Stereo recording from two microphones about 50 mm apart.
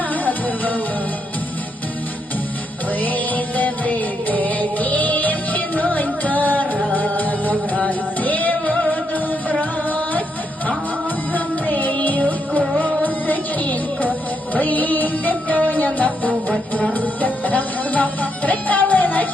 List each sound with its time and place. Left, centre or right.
0.1 s music: left
3.0 s music: left
11.3 s music: left